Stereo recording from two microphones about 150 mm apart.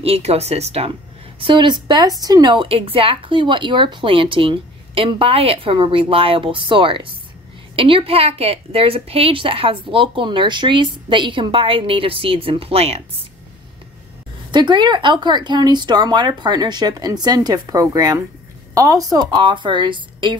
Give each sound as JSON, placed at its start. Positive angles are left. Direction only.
{"t": 0.0, "sound": "speech", "side_deg": -40}
{"t": 1.4, "sound": "a woman's voice", "side_deg": -30}
{"t": 14.5, "sound": "a woman's voice", "side_deg": -30}